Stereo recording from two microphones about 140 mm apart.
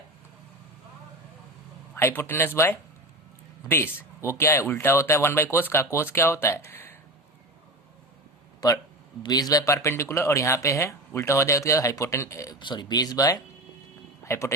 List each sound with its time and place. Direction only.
2.0 s speech: 15° left (ahead or behind)
8.6 s speech: 25° left (ahead or behind)
12.5 s a man's voice: 35° left (ahead or behind)